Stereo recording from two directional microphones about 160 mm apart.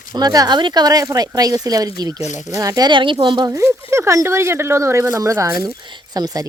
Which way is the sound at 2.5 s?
20° right (ahead or behind).